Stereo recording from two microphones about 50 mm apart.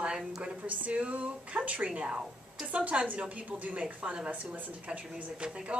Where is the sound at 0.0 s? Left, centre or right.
Right.